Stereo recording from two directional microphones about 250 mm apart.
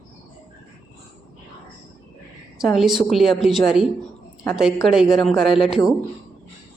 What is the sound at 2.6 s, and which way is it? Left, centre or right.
Speech, centre.